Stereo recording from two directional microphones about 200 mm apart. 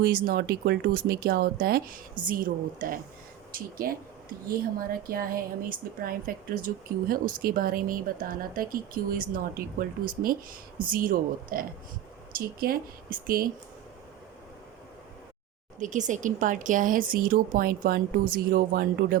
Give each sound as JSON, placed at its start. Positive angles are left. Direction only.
{"t": 0.0, "sound": "speech", "side_deg": -45}
{"t": 15.8, "sound": "speech", "side_deg": -40}